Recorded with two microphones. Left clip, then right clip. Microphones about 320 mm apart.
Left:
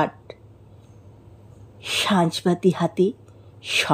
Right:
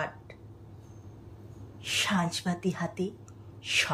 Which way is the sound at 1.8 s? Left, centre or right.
Centre.